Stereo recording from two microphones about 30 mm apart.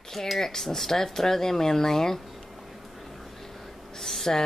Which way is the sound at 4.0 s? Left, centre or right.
Centre.